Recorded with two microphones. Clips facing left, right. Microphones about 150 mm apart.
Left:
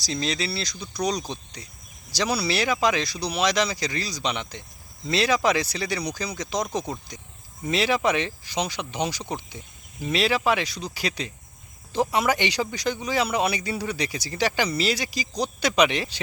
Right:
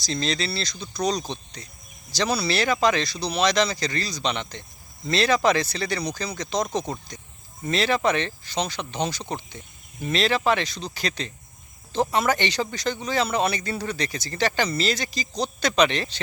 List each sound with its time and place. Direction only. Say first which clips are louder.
0.0 s speech: right 1 dB; 10° left (ahead or behind)